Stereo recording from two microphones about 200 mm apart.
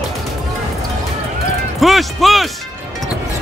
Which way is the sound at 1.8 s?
Centre (ahead or behind).